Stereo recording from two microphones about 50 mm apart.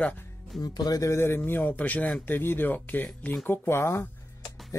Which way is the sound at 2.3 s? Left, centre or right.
Left.